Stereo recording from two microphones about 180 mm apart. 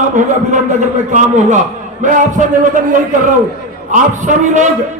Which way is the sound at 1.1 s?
45° right (ahead or behind).